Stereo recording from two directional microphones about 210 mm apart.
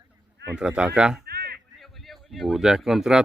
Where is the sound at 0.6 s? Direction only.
5° right (ahead or behind).